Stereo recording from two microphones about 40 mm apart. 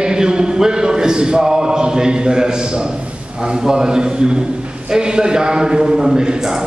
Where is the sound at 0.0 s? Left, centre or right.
Centre.